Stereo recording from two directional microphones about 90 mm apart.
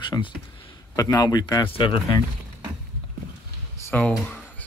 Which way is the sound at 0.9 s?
50° left (ahead or behind).